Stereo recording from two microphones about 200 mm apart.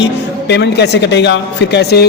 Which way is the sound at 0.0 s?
60° left (ahead or behind).